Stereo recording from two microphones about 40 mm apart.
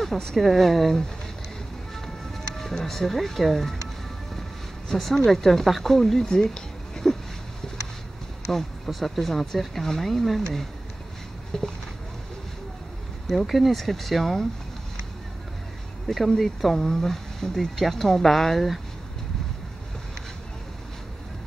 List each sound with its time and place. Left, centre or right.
0.0 s speech: centre
2.5 s speech: centre
6.2 s a sound: centre
8.5 s speech: centre
13.3 s speech: centre
16.3 s speech: centre